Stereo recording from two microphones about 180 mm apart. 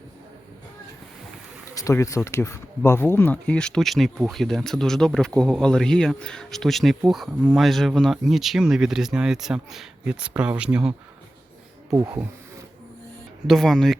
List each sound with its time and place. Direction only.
1.7 s speech: 20° left (ahead or behind); by 10.9 s 5° right (ahead or behind)
11.9 s speech: 20° right (ahead or behind)
13.5 s speech: centre (ahead or behind)